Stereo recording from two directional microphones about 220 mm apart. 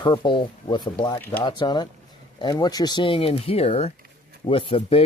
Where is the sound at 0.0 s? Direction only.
20° left (ahead or behind).